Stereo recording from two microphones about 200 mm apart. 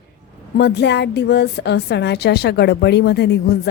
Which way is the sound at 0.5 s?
55° left (ahead or behind).